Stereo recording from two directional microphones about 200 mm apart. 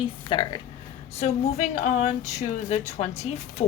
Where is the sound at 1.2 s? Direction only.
35° left (ahead or behind).